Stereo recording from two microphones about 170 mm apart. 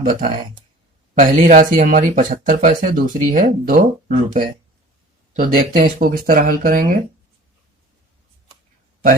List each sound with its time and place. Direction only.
0.0 s speech: 55° right (ahead or behind)
5.4 s speech: 55° right (ahead or behind)